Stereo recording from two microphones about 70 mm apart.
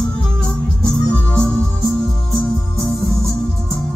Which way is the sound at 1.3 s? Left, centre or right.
Centre.